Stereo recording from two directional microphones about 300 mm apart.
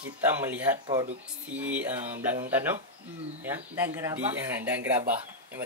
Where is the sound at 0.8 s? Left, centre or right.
Centre.